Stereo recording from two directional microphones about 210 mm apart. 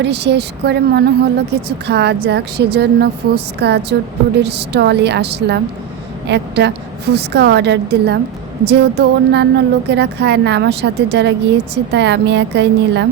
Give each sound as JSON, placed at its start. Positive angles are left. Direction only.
{"t": 0.0, "sound": "a woman's voice", "side_deg": -55}